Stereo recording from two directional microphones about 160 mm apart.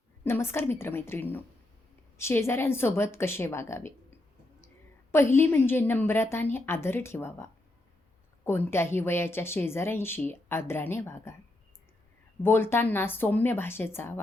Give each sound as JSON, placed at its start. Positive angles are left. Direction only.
{"t": 0.3, "sound": "a woman's voice", "side_deg": 15}
{"t": 5.1, "sound": "a woman's voice", "side_deg": 15}
{"t": 12.4, "sound": "a woman's voice", "side_deg": 15}